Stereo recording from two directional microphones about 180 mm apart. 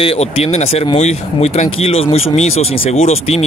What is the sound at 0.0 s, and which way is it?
Speech, 35° left (ahead or behind).